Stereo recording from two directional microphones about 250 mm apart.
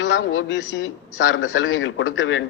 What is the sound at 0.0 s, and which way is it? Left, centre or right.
A man's voice, left.